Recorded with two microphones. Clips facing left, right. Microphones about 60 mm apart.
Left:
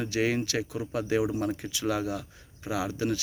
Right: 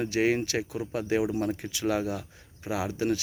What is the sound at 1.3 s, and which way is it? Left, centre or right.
Speech, centre.